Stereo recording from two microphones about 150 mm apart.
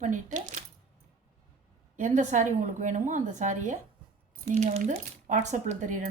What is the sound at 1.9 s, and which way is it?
A woman's voice, 55° right (ahead or behind).